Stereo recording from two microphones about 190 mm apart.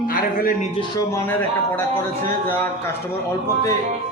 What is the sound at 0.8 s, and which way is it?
Speech, 10° left (ahead or behind).